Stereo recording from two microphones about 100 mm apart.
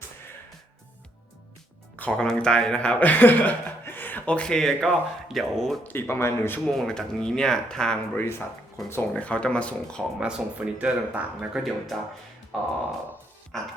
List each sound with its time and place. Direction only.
2.1 s speech: 5° left (ahead or behind)
5.9 s speech: 25° left (ahead or behind)
6.7 s speech: 5° left (ahead or behind)
8.1 s speech: 20° left (ahead or behind)
10.2 s speech: 10° right (ahead or behind)
13.5 s speech: 5° left (ahead or behind)